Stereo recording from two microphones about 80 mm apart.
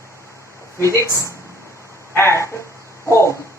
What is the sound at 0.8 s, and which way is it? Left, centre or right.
A woman's voice, left.